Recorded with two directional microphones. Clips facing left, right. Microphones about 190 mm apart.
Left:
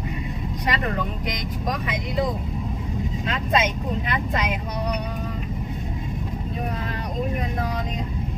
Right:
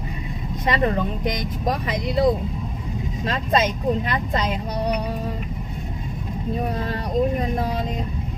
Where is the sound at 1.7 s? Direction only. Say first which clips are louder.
Right 4 dB; 35° right (ahead or behind).